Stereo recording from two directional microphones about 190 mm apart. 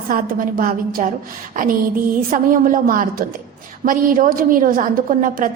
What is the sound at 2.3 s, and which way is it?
A woman's voice, 45° right (ahead or behind).